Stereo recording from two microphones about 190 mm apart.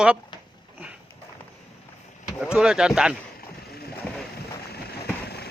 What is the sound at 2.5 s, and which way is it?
Speech, 5° right (ahead or behind).